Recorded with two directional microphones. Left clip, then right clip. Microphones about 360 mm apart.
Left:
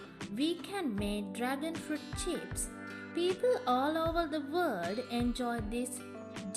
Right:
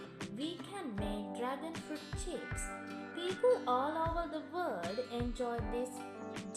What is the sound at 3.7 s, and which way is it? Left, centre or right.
Music, left.